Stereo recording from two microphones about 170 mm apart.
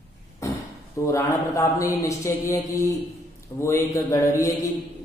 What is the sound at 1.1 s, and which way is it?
A man's voice, 20° left (ahead or behind).